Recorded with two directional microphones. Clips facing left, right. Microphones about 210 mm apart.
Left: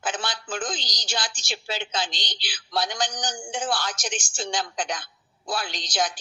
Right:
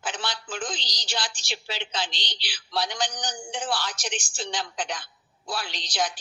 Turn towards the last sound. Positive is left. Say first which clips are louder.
# left 2 dB
turn(degrees=45)  # may be behind; listen again after turning